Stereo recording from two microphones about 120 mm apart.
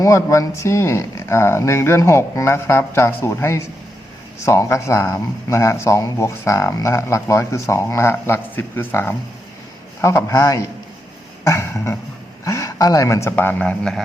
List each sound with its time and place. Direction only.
0.0 s speech: 25° left (ahead or behind)
13.3 s a man's voice: 15° left (ahead or behind)